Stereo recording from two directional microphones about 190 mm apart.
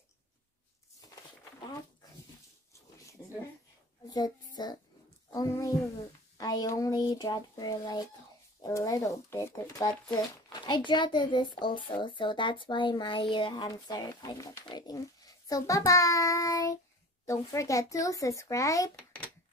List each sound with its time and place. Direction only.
4.6 s speech: 20° left (ahead or behind)
5.3 s a sound: 20° left (ahead or behind)
6.3 s speech: 20° left (ahead or behind)